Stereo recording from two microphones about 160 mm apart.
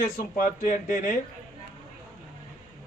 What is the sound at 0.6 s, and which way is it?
Speech, 55° left (ahead or behind).